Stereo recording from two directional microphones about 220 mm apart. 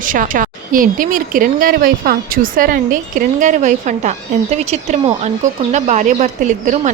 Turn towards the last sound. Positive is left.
turn(degrees=-35)  # may be behind; listen again after turning